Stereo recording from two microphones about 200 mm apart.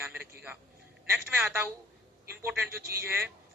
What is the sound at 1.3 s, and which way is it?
Speech, 10° right (ahead or behind).